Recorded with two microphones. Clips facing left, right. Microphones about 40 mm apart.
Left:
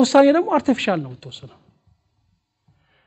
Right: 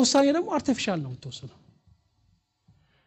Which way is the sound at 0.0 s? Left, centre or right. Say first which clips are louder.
Left 8 dB; left.